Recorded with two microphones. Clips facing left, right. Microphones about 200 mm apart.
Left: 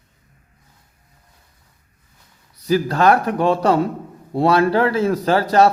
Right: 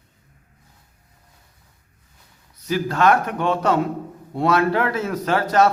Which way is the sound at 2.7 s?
35° left (ahead or behind).